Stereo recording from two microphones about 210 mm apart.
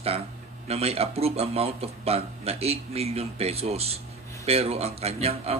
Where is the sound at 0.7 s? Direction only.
30° right (ahead or behind).